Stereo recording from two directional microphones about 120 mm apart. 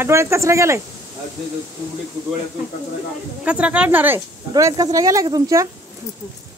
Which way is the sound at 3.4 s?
10° right (ahead or behind).